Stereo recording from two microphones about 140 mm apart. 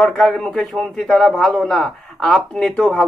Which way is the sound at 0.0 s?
5° left (ahead or behind).